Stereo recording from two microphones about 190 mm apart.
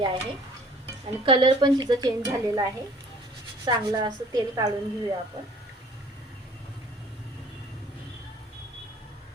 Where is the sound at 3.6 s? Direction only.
20° right (ahead or behind).